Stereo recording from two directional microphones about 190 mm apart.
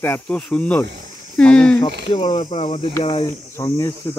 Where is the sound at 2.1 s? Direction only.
30° left (ahead or behind).